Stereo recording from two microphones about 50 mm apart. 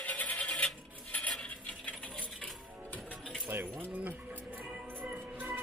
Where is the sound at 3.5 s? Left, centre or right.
Right.